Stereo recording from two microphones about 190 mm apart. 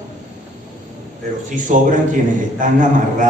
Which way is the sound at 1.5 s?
45° right (ahead or behind).